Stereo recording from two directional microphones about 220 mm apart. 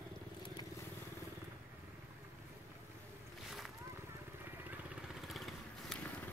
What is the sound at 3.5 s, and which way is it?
Boat, centre (ahead or behind).